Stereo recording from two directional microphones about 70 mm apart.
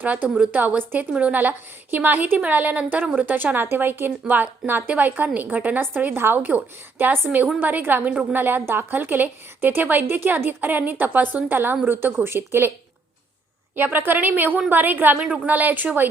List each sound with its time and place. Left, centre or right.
0.5 s a woman's voice: right
7.6 s a woman's voice: right
13.7 s a woman's voice: right